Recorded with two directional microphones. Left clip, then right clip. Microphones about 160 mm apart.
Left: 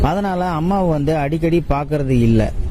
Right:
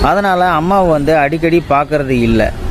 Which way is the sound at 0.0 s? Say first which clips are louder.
Right 8 dB; 45° left (ahead or behind).